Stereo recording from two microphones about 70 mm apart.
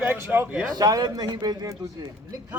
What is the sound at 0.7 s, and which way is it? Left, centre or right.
Speech, right.